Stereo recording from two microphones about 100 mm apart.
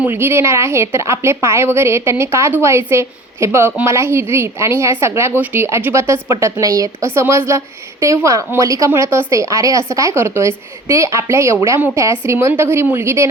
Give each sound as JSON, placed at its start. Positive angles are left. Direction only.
{"t": 0.0, "sound": "a woman's voice", "side_deg": -20}